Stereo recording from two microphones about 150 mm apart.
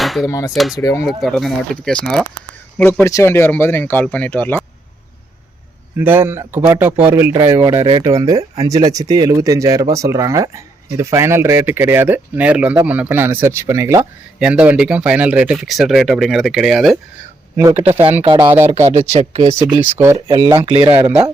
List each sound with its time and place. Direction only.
0.0 s dishes: centre (ahead or behind)
0.3 s speech: 20° left (ahead or behind)
0.5 s speech: centre (ahead or behind)
0.8 s speech: 20° left (ahead or behind)
1.0 s speech: centre (ahead or behind)
6.0 s speech: 15° right (ahead or behind)
14.3 s speech: 10° right (ahead or behind)
17.9 s speech: 45° right (ahead or behind)
18.3 s speech: 30° right (ahead or behind)
18.6 s speech: 45° right (ahead or behind)
20.2 s speech: 25° right (ahead or behind)